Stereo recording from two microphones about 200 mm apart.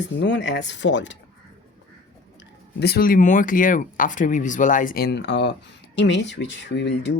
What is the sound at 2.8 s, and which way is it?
A woman's voice, 50° left (ahead or behind).